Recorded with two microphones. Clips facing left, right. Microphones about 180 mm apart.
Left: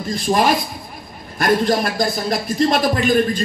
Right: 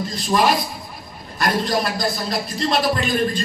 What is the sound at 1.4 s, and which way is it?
Speech, 55° left (ahead or behind).